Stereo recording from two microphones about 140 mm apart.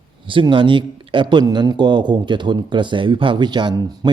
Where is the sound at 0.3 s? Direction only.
35° right (ahead or behind).